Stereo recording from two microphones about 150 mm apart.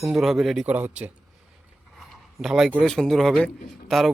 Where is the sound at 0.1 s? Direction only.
Centre (ahead or behind).